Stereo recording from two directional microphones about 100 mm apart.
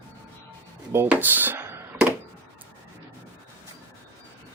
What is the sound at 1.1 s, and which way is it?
Speech, 20° right (ahead or behind).